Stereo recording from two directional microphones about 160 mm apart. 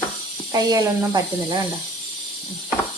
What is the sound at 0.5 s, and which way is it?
A woman's voice, 25° right (ahead or behind).